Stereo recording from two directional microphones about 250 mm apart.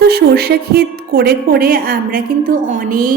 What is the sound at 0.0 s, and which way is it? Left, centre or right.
A woman's voice, right.